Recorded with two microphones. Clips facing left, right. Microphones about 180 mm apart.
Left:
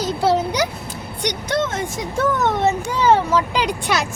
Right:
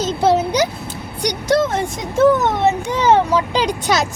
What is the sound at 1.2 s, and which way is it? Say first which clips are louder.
Speech: right 5 dB; 35° right (ahead or behind).